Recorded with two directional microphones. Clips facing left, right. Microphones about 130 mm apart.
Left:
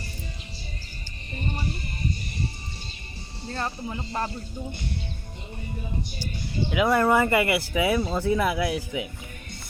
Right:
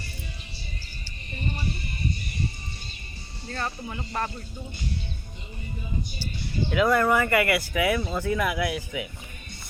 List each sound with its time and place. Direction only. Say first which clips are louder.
3.5 s speech: left 1 dB; 30° left (ahead or behind)
6.7 s speech: even; 15° left (ahead or behind)